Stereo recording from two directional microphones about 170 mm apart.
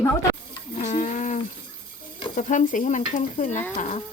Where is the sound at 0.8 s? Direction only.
45° left (ahead or behind).